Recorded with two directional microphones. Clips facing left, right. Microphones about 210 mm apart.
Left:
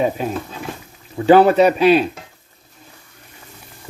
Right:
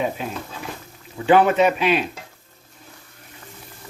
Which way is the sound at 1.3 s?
35° left (ahead or behind).